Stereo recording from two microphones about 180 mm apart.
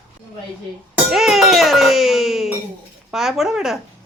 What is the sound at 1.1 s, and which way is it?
Music, centre (ahead or behind).